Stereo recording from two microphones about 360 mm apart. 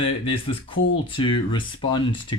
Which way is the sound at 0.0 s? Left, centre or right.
Centre.